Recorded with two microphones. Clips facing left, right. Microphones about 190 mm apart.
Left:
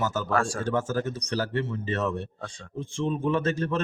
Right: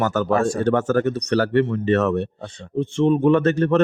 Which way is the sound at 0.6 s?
65° right (ahead or behind).